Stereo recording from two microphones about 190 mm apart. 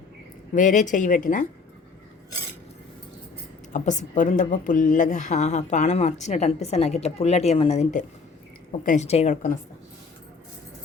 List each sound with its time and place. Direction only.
0.5 s a woman's voice: 40° left (ahead or behind)
3.7 s a woman's voice: 40° left (ahead or behind)